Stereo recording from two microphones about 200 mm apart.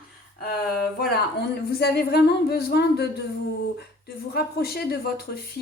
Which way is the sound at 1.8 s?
50° left (ahead or behind).